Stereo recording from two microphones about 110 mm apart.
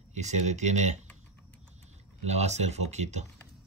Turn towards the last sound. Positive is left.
turn(degrees=-90)